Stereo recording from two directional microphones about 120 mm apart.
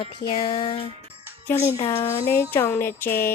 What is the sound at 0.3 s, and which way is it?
Music, 40° left (ahead or behind).